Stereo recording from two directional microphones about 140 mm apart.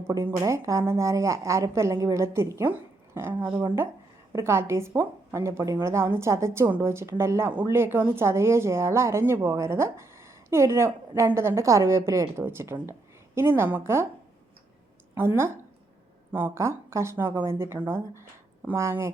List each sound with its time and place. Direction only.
0.1 s a woman's voice: 20° right (ahead or behind)
15.1 s speech: 15° right (ahead or behind)